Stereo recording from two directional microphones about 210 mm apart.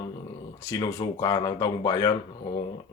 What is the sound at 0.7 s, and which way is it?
Speech, 15° left (ahead or behind).